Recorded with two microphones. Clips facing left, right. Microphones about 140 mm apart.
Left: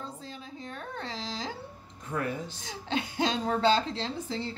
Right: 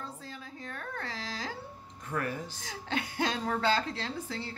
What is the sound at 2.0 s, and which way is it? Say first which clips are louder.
A woman's voice: left 2 dB; 20° left (ahead or behind).